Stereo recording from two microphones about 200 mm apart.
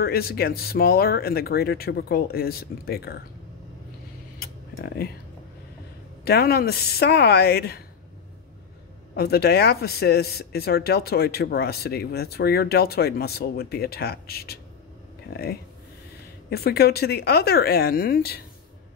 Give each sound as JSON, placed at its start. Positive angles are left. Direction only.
{"t": 0.0, "sound": "speech", "side_deg": 50}
{"t": 4.4, "sound": "a sound", "side_deg": 55}
{"t": 6.2, "sound": "speech", "side_deg": 50}
{"t": 9.1, "sound": "speech", "side_deg": 50}
{"t": 16.4, "sound": "speech", "side_deg": 50}